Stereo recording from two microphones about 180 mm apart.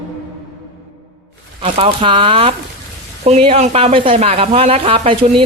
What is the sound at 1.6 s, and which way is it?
Speech, 30° right (ahead or behind).